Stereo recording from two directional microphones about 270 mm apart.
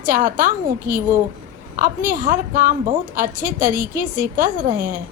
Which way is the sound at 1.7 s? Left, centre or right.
Right.